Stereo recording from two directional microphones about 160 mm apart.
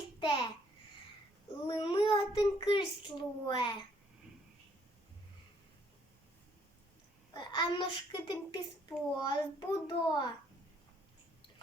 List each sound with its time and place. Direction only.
0.2 s a sound: 30° left (ahead or behind)
1.6 s a child's voice: 30° left (ahead or behind)
7.3 s a child's voice: 30° left (ahead or behind)